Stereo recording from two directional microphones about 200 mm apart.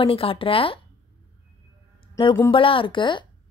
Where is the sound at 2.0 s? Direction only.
25° left (ahead or behind).